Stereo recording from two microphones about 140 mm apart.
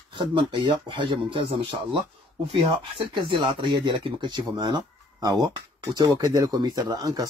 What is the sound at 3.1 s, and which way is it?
Speech, 35° right (ahead or behind).